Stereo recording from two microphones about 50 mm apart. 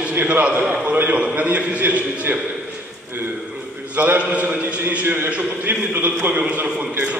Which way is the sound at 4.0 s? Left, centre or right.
Right.